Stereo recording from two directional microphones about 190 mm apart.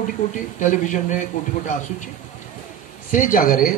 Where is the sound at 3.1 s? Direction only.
45° left (ahead or behind).